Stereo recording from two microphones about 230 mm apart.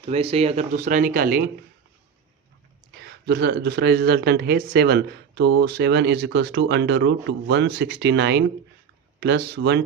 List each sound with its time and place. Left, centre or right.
0.0 s speech: right
2.9 s speech: right